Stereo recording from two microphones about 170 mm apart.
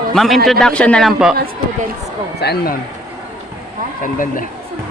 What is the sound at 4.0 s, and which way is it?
Speech, 50° left (ahead or behind).